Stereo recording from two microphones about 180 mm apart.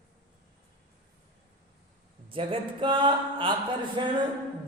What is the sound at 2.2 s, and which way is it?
Speech, 30° right (ahead or behind).